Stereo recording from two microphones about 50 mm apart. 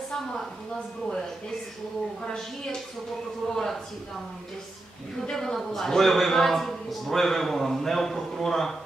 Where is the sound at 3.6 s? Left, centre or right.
Centre.